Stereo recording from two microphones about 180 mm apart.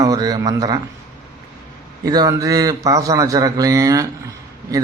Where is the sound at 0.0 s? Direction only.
20° right (ahead or behind).